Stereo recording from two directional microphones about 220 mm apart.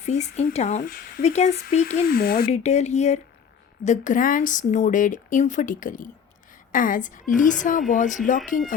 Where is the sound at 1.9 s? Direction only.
45° left (ahead or behind).